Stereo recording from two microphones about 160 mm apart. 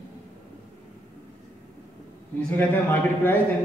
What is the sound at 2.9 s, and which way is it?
Speech, 15° left (ahead or behind).